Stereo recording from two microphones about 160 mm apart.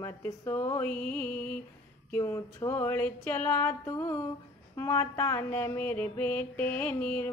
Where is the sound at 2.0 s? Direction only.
15° left (ahead or behind).